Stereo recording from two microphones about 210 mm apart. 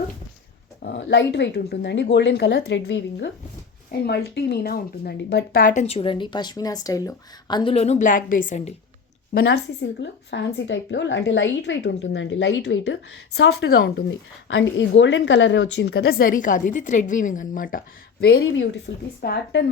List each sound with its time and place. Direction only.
0.8 s speech: 50° left (ahead or behind); by 8.7 s 35° left (ahead or behind)
10.0 s a woman's voice: 60° left (ahead or behind)